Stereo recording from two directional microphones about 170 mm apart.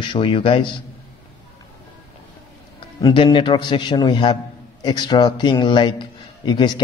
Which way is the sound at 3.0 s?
30° left (ahead or behind).